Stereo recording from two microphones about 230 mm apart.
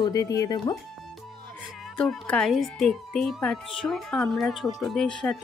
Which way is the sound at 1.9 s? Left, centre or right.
Centre.